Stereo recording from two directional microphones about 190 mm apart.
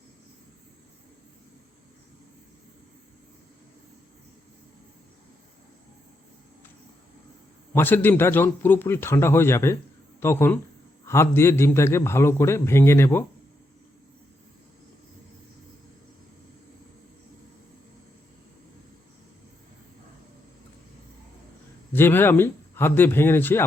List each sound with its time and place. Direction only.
7.7 s a man's voice: 10° left (ahead or behind)
21.9 s a man's voice: 10° left (ahead or behind)